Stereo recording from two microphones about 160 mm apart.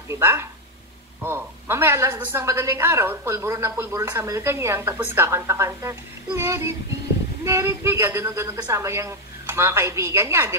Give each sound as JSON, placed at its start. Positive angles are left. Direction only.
{"t": 0.1, "sound": "a woman's voice", "side_deg": -15}